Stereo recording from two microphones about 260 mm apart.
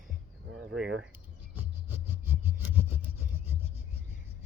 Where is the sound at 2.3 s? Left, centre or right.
Centre.